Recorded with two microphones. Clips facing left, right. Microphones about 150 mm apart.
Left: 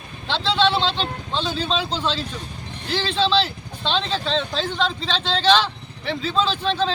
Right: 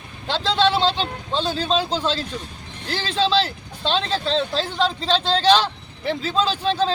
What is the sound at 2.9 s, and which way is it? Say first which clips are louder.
A man's voice: even; 40° right (ahead or behind).